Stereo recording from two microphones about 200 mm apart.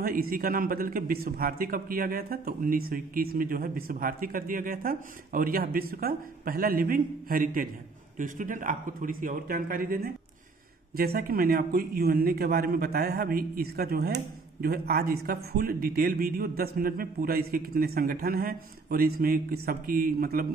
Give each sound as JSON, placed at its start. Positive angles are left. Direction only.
{"t": 0.0, "sound": "a man's voice", "side_deg": -45}